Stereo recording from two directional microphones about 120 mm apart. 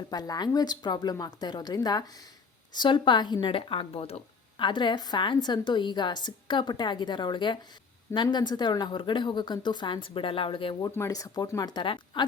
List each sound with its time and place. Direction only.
0.1 s a woman's voice: 35° left (ahead or behind); by 4.6 s 55° left (ahead or behind)
4.6 s a woman's voice: 40° left (ahead or behind)
10.8 s a woman's voice: 25° left (ahead or behind); by 12.2 s 40° left (ahead or behind)